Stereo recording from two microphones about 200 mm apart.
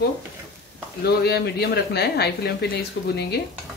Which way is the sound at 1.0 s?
55° left (ahead or behind).